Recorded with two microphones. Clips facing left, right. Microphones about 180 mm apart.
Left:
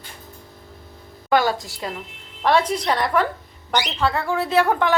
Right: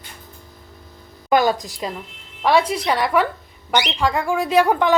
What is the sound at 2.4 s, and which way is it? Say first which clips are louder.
Speech: right 1 dB; 5° right (ahead or behind).